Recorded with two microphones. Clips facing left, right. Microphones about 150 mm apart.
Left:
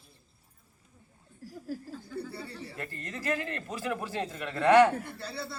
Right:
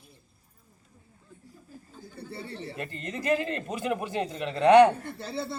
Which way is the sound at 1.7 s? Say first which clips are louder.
Left 12 dB; 90° left.